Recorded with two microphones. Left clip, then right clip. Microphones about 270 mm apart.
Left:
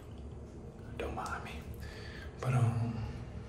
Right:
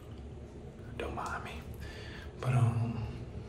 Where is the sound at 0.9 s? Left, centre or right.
Centre.